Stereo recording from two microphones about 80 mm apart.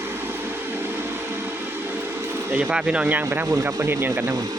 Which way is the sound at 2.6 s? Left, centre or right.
Centre.